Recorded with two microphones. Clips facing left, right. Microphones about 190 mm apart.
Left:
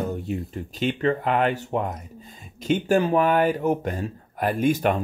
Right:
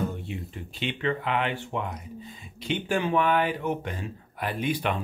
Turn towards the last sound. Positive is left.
turn(degrees=45)  # may be behind; listen again after turning